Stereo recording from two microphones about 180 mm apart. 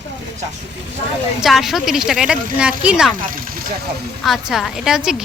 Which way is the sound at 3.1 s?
50° right (ahead or behind).